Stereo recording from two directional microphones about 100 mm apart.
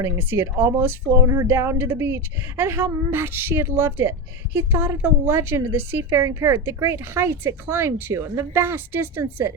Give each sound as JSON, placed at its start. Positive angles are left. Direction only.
{"t": 0.0, "sound": "a woman's voice", "side_deg": -25}